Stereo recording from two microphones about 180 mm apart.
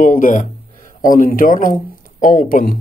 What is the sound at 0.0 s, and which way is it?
Speech, 45° left (ahead or behind).